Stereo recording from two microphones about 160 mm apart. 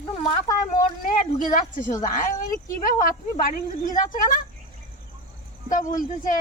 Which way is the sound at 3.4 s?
55° left (ahead or behind).